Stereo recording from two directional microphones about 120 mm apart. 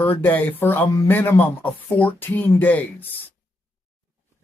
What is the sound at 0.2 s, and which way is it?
Speech, 15° left (ahead or behind).